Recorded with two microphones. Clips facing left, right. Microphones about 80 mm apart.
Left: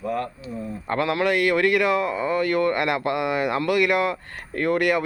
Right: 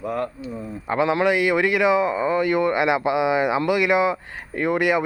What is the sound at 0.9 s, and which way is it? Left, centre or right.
A man's voice, centre.